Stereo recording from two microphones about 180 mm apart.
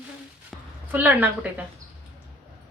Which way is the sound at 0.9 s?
10° right (ahead or behind).